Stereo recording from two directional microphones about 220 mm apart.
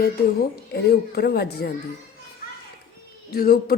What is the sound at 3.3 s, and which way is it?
Speech, 45° left (ahead or behind).